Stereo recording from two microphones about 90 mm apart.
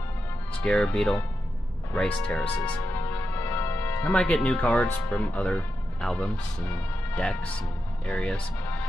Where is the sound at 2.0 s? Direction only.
15° left (ahead or behind).